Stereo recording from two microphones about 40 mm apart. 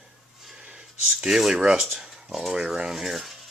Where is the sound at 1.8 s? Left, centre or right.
Centre.